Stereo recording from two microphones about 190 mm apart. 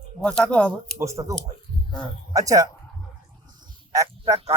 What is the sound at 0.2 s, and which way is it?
Speech, 5° left (ahead or behind).